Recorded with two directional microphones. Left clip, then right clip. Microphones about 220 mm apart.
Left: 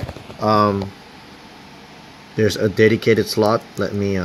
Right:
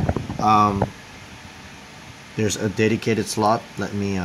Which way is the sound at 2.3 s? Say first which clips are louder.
Left 6 dB; 10° left (ahead or behind).